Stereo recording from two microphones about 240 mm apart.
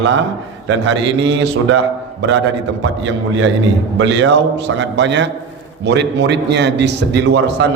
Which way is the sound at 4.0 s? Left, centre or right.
Right.